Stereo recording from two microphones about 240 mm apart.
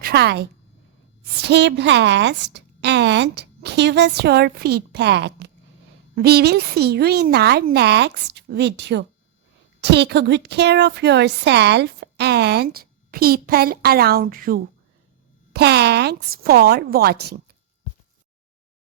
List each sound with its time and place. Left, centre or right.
0.0 s a woman's voice: right